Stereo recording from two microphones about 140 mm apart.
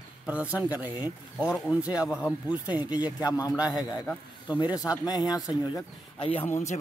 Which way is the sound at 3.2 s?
25° left (ahead or behind).